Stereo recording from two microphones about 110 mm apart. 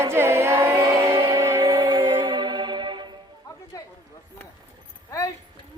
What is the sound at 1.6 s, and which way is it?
Music, 45° right (ahead or behind).